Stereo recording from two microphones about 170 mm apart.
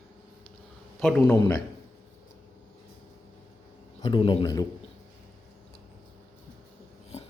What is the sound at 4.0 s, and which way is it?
Speech, 30° left (ahead or behind).